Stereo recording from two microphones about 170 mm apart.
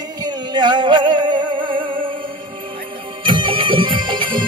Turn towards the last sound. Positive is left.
turn(degrees=-30)  # may be behind; listen again after turning